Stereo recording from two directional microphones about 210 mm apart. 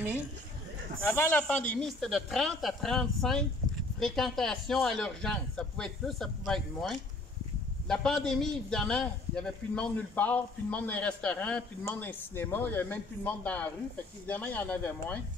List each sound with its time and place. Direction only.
1.0 s a man's voice: 10° left (ahead or behind)